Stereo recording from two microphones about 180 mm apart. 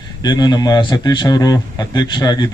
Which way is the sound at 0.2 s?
25° left (ahead or behind).